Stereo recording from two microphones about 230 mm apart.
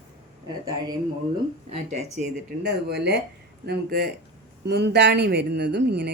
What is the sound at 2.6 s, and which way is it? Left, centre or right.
A woman's voice, right.